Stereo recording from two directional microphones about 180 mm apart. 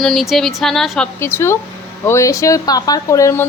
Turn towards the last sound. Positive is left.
turn(degrees=15)  # may be behind; listen again after turning